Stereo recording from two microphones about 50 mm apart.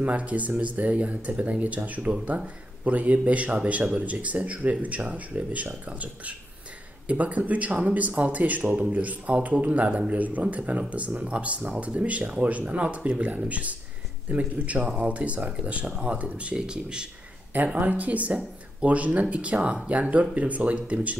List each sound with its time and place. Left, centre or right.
0.0 s speech: right
17.7 s speech: right